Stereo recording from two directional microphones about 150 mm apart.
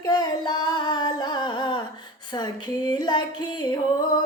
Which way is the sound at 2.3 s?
30° left (ahead or behind).